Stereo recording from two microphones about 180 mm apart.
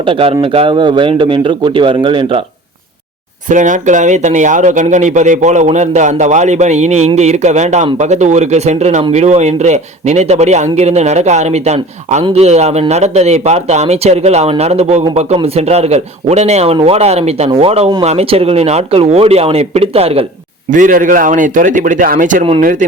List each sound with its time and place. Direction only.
0.0 s a man's voice: 30° right (ahead or behind)
3.5 s speech: 45° right (ahead or behind)
20.7 s a man's voice: 45° right (ahead or behind)